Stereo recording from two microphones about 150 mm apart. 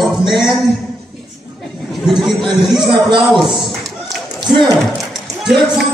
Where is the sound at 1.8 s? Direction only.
Centre (ahead or behind).